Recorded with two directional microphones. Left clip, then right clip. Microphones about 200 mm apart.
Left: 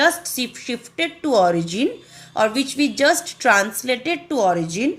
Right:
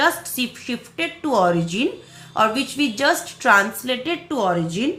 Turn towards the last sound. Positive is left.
turn(degrees=25)  # may be behind; listen again after turning